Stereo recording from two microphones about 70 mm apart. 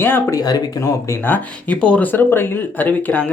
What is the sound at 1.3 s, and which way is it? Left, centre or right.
Speech, centre.